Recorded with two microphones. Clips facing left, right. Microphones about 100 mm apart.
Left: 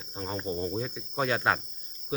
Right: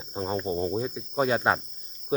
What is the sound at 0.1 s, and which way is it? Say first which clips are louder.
Cricket: right 5 dB; 25° right (ahead or behind).